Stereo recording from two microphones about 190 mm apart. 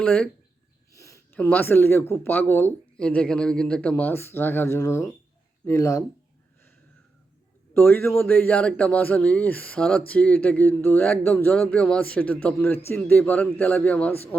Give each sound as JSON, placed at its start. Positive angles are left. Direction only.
{"t": 0.0, "sound": "speech", "side_deg": 5}
{"t": 0.9, "sound": "speech", "side_deg": 15}
{"t": 7.7, "sound": "speech", "side_deg": 10}